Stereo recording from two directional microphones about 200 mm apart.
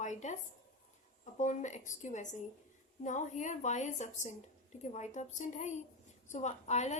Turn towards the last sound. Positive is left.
turn(degrees=35)  # may be behind; listen again after turning